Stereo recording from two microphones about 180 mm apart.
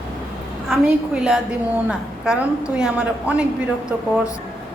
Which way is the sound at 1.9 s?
5° right (ahead or behind).